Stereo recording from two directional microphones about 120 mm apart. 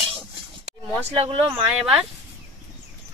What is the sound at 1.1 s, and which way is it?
Speech, 55° right (ahead or behind).